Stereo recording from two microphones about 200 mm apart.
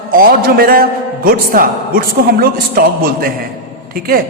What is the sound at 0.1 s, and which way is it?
A man's voice, 45° right (ahead or behind).